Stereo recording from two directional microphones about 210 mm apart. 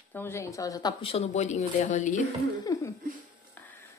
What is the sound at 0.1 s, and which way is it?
A woman's voice, 10° left (ahead or behind).